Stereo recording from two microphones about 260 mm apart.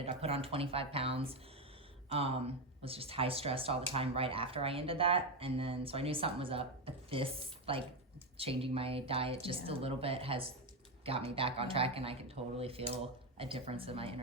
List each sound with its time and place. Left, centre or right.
0.0 s speech: right